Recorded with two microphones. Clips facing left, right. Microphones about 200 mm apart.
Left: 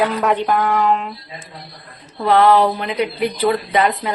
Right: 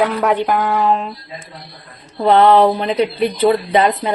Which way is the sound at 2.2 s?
25° right (ahead or behind).